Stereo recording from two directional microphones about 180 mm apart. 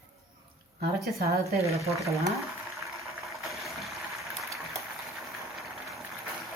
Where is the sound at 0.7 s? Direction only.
60° right (ahead or behind).